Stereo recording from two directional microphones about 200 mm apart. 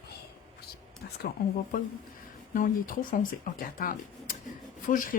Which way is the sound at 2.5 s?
45° left (ahead or behind).